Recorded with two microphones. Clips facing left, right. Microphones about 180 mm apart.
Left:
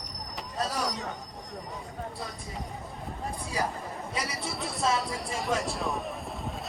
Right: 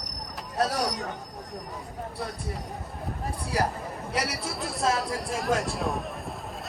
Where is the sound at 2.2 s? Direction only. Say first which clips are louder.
Right 4 dB; 65° right (ahead or behind).